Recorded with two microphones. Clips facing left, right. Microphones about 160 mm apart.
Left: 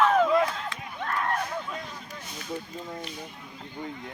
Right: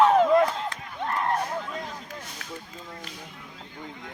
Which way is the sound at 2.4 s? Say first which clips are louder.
Left 9 dB; 90° right.